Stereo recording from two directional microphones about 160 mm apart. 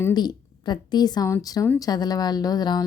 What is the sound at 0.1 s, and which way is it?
A woman's voice, 25° left (ahead or behind).